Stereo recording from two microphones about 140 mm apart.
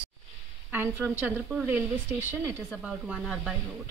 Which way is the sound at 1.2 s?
10° right (ahead or behind).